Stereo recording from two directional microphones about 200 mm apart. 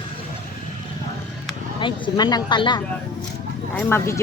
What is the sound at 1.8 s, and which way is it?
Speech, 25° left (ahead or behind).